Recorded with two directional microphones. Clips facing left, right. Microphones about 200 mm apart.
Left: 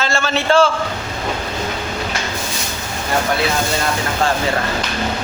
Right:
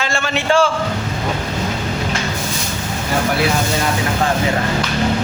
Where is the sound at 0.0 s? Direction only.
15° right (ahead or behind).